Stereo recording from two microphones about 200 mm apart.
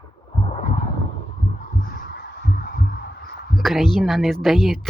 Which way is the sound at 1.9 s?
50° left (ahead or behind).